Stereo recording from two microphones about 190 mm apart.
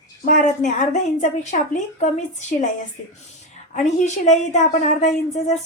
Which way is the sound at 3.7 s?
35° left (ahead or behind).